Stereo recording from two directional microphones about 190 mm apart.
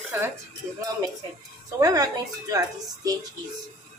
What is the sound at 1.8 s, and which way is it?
Speech, 20° right (ahead or behind).